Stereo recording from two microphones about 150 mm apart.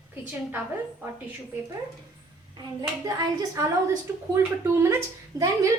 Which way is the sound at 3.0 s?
25° right (ahead or behind).